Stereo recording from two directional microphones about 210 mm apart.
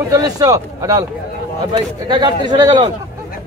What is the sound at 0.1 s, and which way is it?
A man's voice, 15° right (ahead or behind).